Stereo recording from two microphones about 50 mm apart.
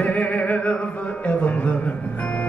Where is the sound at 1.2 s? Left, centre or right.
Left.